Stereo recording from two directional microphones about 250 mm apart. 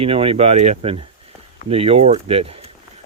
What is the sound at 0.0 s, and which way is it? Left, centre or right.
Speech, right.